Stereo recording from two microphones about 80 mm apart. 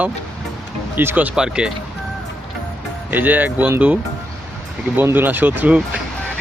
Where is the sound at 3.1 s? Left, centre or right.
Right.